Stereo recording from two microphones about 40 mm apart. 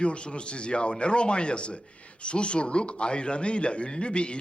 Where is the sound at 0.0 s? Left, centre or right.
Left.